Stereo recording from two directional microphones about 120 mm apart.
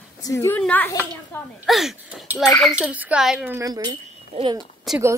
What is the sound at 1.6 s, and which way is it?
A woman's voice, centre (ahead or behind).